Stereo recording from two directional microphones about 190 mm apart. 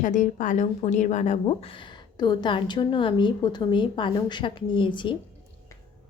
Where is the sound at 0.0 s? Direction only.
40° left (ahead or behind); by 5.1 s 25° left (ahead or behind).